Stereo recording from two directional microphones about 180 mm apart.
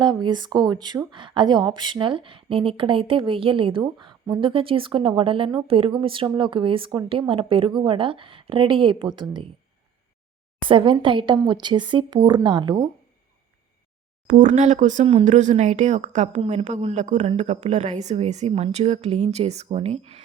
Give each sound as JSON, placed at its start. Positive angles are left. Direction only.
{"t": 0.0, "sound": "a woman's voice", "side_deg": -25}
{"t": 10.6, "sound": "a woman's voice", "side_deg": -25}
{"t": 14.3, "sound": "speech", "side_deg": -45}